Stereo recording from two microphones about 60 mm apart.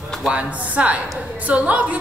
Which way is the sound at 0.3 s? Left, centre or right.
Right.